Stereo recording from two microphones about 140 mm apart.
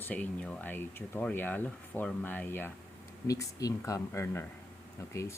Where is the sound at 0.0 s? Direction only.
10° left (ahead or behind).